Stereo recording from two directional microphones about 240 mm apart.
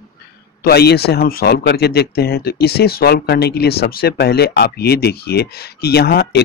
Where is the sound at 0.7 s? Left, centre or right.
Left.